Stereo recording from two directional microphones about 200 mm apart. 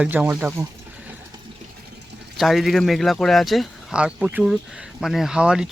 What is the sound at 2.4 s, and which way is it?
Speech, centre (ahead or behind).